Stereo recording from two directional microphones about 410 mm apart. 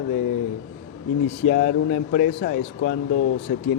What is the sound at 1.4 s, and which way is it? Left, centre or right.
Speech, centre.